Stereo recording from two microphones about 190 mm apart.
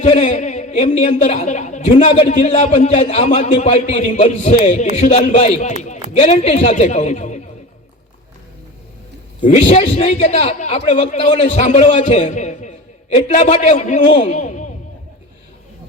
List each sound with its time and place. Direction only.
0.0 s a woman's voice: 35° left (ahead or behind)
9.4 s a woman's voice: 35° left (ahead or behind)